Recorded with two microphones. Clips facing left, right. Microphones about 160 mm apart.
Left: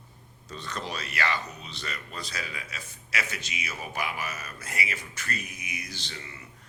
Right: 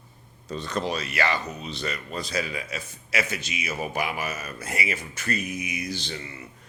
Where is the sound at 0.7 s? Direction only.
15° right (ahead or behind).